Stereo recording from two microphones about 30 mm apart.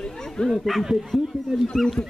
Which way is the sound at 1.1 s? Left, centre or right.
Centre.